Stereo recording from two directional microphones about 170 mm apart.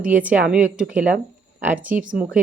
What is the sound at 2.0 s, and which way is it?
Speech, 55° right (ahead or behind).